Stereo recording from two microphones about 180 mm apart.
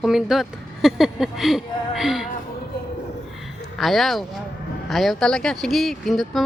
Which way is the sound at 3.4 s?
Centre (ahead or behind).